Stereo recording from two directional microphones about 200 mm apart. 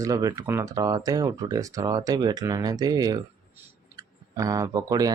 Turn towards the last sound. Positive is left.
turn(degrees=-20)  # may be behind; listen again after turning